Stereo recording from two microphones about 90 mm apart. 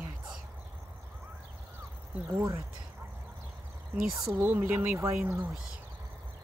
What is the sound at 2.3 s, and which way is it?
Speech, 35° right (ahead or behind).